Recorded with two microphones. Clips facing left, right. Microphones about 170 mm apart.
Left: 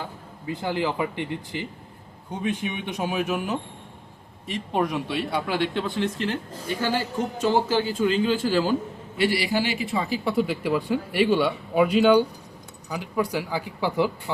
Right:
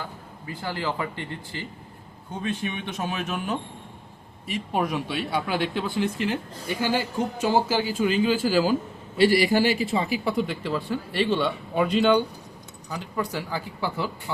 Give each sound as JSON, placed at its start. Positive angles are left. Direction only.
{"t": 0.4, "sound": "a man's voice", "side_deg": 20}
{"t": 4.4, "sound": "speech", "side_deg": -5}
{"t": 9.1, "sound": "a man's voice", "side_deg": -40}
{"t": 9.8, "sound": "a woman's voice", "side_deg": -25}
{"t": 10.2, "sound": "a man's voice", "side_deg": 5}